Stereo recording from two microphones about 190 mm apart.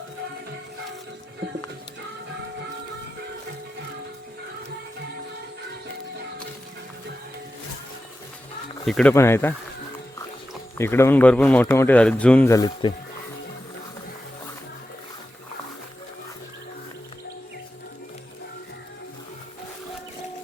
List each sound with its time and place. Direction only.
8.9 s speech: 5° left (ahead or behind)
10.8 s speech: 15° left (ahead or behind)
12.5 s speech: 20° left (ahead or behind)